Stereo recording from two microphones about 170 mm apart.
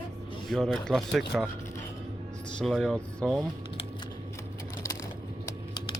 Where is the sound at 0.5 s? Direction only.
5° left (ahead or behind).